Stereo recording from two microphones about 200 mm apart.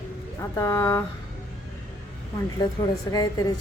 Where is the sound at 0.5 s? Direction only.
15° left (ahead or behind).